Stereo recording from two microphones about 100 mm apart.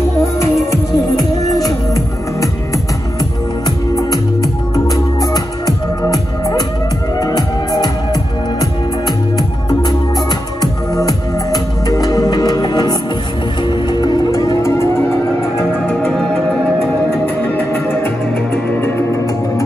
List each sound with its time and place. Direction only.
0.7 s music: 35° left (ahead or behind)
3.6 s music: 40° left (ahead or behind)
10.6 s music: 40° left (ahead or behind); by 16.1 s 20° left (ahead or behind)
16.1 s music: 5° left (ahead or behind)
17.6 s music: 20° left (ahead or behind)